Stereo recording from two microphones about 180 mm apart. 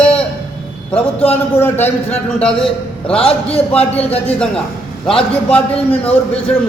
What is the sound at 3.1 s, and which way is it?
Speech, 30° left (ahead or behind).